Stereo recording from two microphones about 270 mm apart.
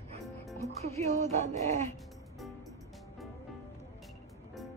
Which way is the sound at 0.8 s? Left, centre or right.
Right.